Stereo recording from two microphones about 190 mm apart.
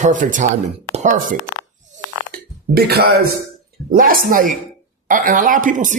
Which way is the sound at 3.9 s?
50° right (ahead or behind).